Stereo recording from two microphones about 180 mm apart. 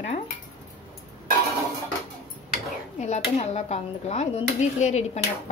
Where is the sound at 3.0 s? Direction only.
40° left (ahead or behind).